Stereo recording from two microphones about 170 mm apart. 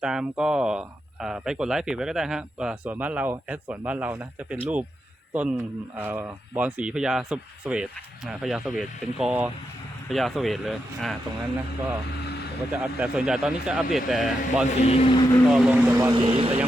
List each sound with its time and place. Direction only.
0.0 s speech: 5° right (ahead or behind)
12.7 s speech: 10° right (ahead or behind)
14.8 s speech: 35° left (ahead or behind)
15.4 s speech: 5° right (ahead or behind)
16.1 s speech: 30° right (ahead or behind)